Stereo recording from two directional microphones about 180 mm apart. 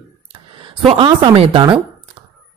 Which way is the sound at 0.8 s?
25° right (ahead or behind).